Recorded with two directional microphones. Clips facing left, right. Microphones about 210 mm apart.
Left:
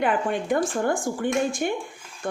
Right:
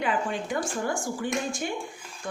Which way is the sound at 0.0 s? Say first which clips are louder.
Left 4 dB; 55° left (ahead or behind).